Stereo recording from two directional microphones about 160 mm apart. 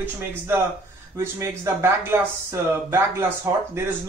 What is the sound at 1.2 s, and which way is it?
Speech, 15° right (ahead or behind).